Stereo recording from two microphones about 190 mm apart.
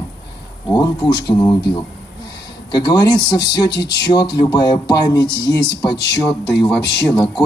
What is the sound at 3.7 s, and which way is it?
Speech, 65° left (ahead or behind).